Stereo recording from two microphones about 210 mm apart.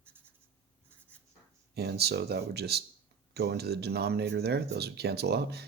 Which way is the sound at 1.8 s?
50° right (ahead or behind).